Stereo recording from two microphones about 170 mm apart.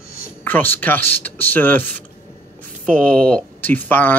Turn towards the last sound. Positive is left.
turn(degrees=10)  # may be behind; listen again after turning